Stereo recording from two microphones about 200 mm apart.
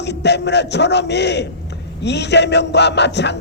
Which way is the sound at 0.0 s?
60° left (ahead or behind).